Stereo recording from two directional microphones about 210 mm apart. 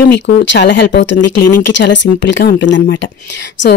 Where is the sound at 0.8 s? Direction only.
45° left (ahead or behind).